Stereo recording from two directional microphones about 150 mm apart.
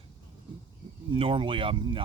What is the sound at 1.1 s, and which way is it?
Speech, 35° right (ahead or behind).